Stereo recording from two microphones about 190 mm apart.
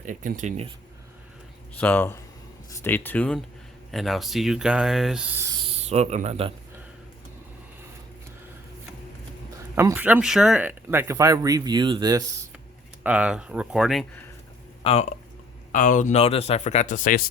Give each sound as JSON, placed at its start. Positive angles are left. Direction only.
{"t": 0.0, "sound": "speech", "side_deg": -45}
{"t": 1.8, "sound": "speech", "side_deg": 10}
{"t": 5.6, "sound": "speech", "side_deg": -35}
{"t": 9.7, "sound": "speech", "side_deg": -10}
{"t": 13.0, "sound": "speech", "side_deg": -5}
{"t": 14.8, "sound": "speech", "side_deg": 30}
{"t": 15.7, "sound": "speech", "side_deg": 40}